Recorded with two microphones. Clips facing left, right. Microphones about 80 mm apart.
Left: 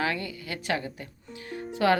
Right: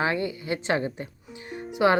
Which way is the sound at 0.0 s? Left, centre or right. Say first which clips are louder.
Right 4 dB; right.